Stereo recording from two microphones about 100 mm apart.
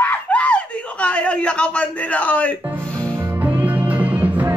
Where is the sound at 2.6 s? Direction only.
20° right (ahead or behind).